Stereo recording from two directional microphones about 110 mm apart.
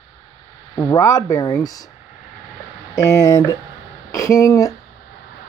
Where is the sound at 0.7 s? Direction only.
30° left (ahead or behind).